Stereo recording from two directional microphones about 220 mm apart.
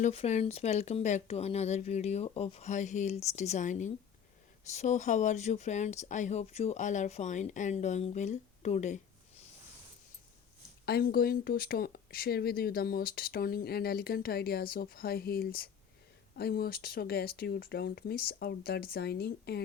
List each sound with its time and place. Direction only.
0.0 s speech: 30° left (ahead or behind)
10.8 s speech: 45° left (ahead or behind)